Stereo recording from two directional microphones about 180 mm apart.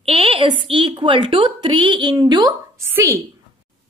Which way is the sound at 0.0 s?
30° right (ahead or behind).